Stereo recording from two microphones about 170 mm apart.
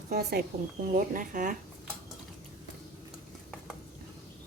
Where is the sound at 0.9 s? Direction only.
55° right (ahead or behind).